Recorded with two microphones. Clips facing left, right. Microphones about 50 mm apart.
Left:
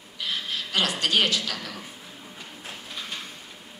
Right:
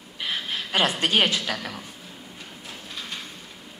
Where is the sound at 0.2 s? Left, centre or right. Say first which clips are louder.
Right 1 dB; right.